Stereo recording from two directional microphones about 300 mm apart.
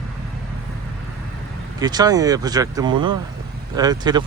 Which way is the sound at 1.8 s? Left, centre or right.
Centre.